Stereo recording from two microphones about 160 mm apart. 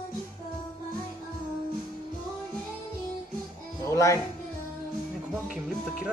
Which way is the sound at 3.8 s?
20° left (ahead or behind).